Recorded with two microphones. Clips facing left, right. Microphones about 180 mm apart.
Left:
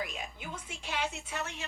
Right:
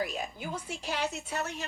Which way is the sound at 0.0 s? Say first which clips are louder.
Right 5 dB; 40° right (ahead or behind).